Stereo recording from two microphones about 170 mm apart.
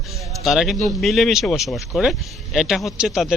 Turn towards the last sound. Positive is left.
turn(degrees=0)  # may be behind; listen again after turning